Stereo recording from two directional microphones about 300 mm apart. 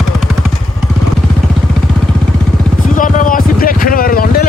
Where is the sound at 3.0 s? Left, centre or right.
Left.